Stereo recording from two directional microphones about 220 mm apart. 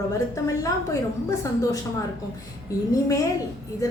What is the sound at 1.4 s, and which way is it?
Speech, 15° left (ahead or behind).